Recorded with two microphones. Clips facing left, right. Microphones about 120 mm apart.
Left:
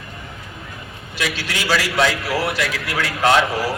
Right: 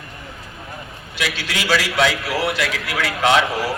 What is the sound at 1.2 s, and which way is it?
A man's voice, centre (ahead or behind).